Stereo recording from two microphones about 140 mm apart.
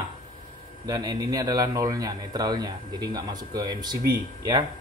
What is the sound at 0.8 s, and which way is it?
A man's voice, 30° right (ahead or behind).